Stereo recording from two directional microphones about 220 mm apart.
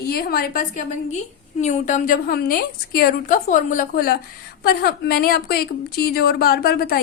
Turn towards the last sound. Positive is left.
turn(degrees=45)  # may be behind; listen again after turning